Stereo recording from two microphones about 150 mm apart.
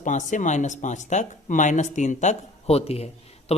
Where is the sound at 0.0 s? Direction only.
55° left (ahead or behind).